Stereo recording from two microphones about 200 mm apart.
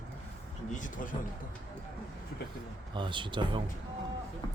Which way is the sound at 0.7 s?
40° left (ahead or behind).